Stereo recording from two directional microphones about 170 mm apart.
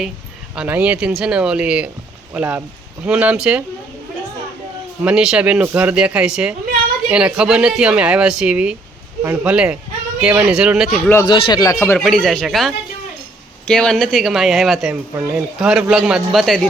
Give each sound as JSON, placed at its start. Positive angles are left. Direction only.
{"t": 0.5, "sound": "speech", "side_deg": -5}
{"t": 5.0, "sound": "speech", "side_deg": -5}
{"t": 11.3, "sound": "speech", "side_deg": 30}
{"t": 11.9, "sound": "speech", "side_deg": 5}